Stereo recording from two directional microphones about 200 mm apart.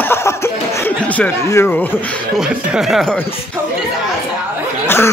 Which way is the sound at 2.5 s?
5° right (ahead or behind).